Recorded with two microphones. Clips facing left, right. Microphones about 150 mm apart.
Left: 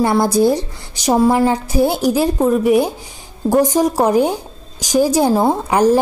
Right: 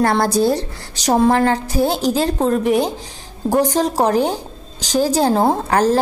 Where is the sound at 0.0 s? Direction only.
15° left (ahead or behind).